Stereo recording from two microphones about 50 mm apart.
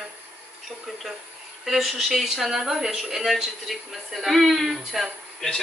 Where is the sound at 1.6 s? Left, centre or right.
Centre.